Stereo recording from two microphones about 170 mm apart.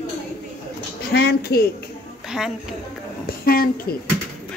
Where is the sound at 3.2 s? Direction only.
60° left (ahead or behind).